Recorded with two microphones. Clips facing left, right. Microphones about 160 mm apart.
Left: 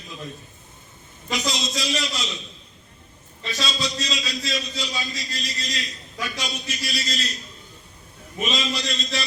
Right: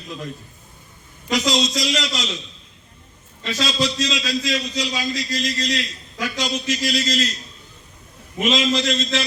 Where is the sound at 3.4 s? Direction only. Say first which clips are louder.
Right 6 dB; 90° right.